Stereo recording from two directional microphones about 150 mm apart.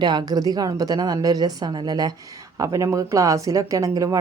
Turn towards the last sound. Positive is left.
turn(degrees=-20)  # may be behind; listen again after turning